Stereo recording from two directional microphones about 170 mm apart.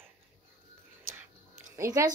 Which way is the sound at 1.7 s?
20° right (ahead or behind).